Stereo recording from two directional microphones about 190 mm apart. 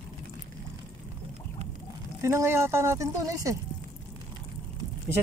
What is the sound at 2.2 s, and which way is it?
Speech, 15° right (ahead or behind).